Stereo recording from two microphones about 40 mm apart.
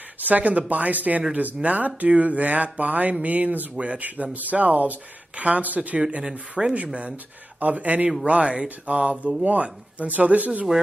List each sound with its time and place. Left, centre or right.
0.2 s speech: right
3.7 s speech: right
4.0 s speech: right
6.6 s speech: centre
7.6 s speech: right